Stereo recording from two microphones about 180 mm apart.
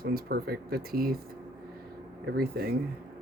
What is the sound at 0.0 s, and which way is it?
Speech, 60° right (ahead or behind).